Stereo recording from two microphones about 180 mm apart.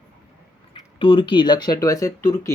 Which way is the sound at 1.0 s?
25° left (ahead or behind).